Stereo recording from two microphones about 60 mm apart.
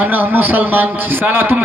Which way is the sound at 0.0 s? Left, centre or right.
Right.